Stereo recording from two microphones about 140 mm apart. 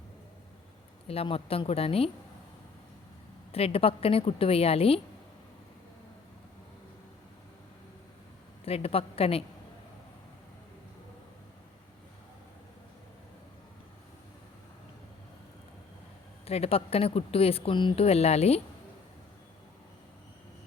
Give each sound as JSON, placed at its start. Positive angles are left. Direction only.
{"t": 1.0, "sound": "speech", "side_deg": 45}
{"t": 3.5, "sound": "speech", "side_deg": 45}
{"t": 8.6, "sound": "speech", "side_deg": 45}
{"t": 16.5, "sound": "speech", "side_deg": 45}